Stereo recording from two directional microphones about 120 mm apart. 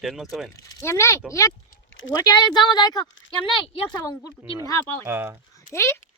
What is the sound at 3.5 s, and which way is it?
Speech, 45° left (ahead or behind).